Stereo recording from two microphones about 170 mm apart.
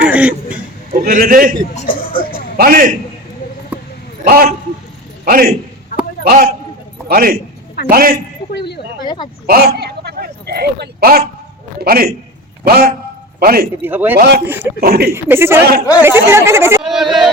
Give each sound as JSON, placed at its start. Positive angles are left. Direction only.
{"t": 0.0, "sound": "chuckle", "side_deg": -10}
{"t": 0.9, "sound": "a man's voice", "side_deg": -55}
{"t": 1.7, "sound": "speech", "side_deg": 55}
{"t": 2.6, "sound": "a man's voice", "side_deg": -55}
{"t": 4.2, "sound": "a man's voice", "side_deg": -60}
{"t": 8.5, "sound": "speech", "side_deg": 75}
{"t": 9.0, "sound": "speech", "side_deg": 25}
{"t": 9.5, "sound": "a man's voice", "side_deg": -65}
{"t": 13.8, "sound": "speech", "side_deg": -10}
{"t": 14.2, "sound": "a man's voice", "side_deg": -65}
{"t": 14.4, "sound": "speech", "side_deg": -10}
{"t": 14.8, "sound": "speech", "side_deg": -65}
{"t": 15.1, "sound": "speech", "side_deg": -15}
{"t": 16.8, "sound": "speech", "side_deg": 0}